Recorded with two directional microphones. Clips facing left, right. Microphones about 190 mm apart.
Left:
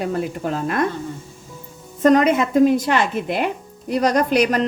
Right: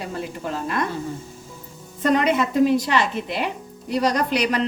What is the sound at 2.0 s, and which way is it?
A woman's voice, 45° left (ahead or behind).